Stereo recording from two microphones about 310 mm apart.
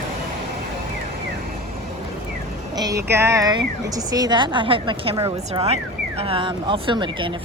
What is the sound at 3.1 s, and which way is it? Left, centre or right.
A woman's voice, centre.